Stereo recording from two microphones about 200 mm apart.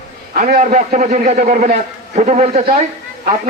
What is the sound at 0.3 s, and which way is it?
Speech, 40° right (ahead or behind).